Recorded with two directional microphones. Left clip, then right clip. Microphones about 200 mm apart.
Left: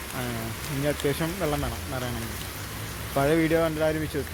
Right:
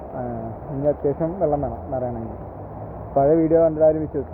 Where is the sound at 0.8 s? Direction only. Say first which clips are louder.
Right 6 dB; 20° left (ahead or behind).